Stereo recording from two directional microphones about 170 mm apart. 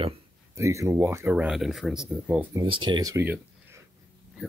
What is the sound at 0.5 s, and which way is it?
Speech, 15° right (ahead or behind).